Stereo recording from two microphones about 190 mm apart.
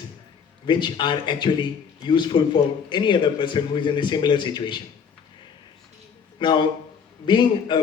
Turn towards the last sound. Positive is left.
turn(degrees=25)  # may be behind; listen again after turning